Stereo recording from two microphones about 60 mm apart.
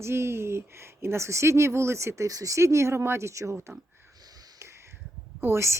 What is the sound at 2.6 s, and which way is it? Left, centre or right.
Speech, right.